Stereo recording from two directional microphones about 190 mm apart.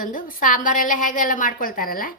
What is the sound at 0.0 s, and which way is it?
A woman's voice, 45° left (ahead or behind).